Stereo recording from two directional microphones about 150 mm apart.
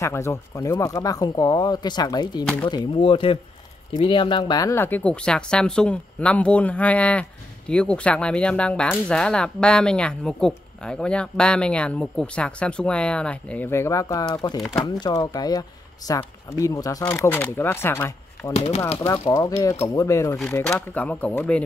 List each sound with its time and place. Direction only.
0.0 s speech: 20° left (ahead or behind)
18.5 s speech: 40° left (ahead or behind)
19.2 s speech: 25° left (ahead or behind)
20.6 s speech: 10° left (ahead or behind)